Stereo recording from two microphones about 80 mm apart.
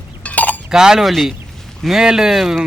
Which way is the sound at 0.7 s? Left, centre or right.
Centre.